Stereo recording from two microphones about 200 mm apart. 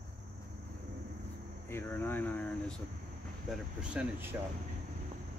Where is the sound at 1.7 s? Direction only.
10° left (ahead or behind).